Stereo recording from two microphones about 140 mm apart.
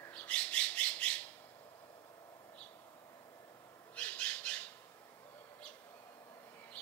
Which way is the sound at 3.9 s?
10° left (ahead or behind).